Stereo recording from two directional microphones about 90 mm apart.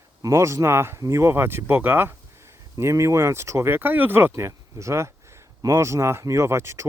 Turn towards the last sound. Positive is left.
turn(degrees=-30)  # may be behind; listen again after turning